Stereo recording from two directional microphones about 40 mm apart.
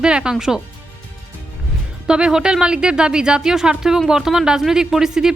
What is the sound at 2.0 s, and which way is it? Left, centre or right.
Speech, right.